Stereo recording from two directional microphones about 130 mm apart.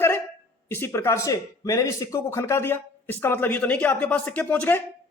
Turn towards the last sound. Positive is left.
turn(degrees=15)  # may be behind; listen again after turning